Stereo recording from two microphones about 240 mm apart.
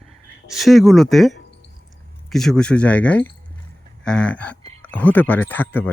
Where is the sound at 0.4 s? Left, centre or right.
Centre.